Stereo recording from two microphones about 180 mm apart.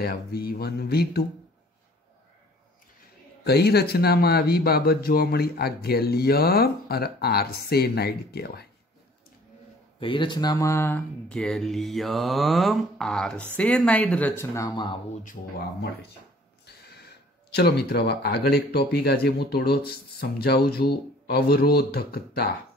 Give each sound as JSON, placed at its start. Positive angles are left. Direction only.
{"t": 0.0, "sound": "speech", "side_deg": 60}
{"t": 3.4, "sound": "speech", "side_deg": 65}
{"t": 9.9, "sound": "speech", "side_deg": 30}
{"t": 16.6, "sound": "speech", "side_deg": 65}